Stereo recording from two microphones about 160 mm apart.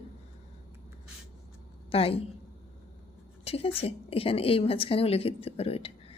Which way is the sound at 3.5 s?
40° left (ahead or behind).